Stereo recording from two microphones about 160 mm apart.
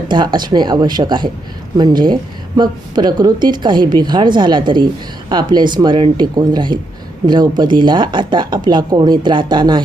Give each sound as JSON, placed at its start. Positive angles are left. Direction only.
{"t": 0.1, "sound": "speech", "side_deg": -30}